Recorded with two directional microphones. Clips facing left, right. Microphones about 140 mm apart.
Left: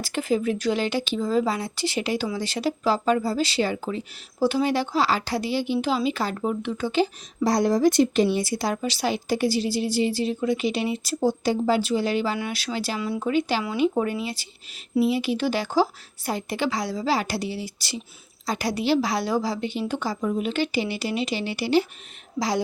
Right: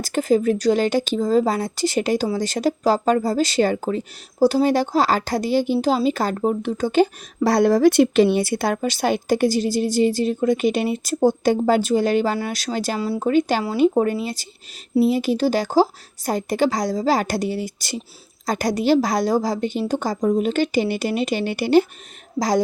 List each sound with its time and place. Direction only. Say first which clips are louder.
0.0 s speech: right 6 dB; 40° right (ahead or behind)